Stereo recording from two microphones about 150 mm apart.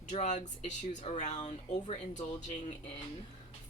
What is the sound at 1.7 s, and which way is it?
Speech, 30° left (ahead or behind).